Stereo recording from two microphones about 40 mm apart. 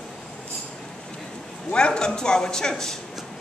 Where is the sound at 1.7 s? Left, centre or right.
Left.